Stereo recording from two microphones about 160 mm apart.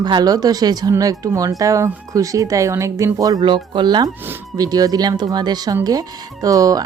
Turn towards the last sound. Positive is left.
turn(degrees=-20)  # may be behind; listen again after turning